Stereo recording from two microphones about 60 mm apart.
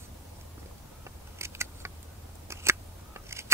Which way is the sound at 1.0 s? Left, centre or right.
Right.